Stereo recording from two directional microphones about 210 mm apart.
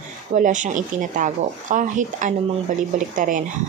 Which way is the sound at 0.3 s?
35° right (ahead or behind).